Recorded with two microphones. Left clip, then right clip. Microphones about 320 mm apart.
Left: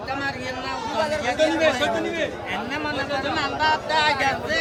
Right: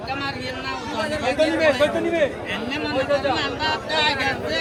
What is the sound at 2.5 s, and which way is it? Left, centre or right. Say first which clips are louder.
A man's voice: right 2 dB; centre.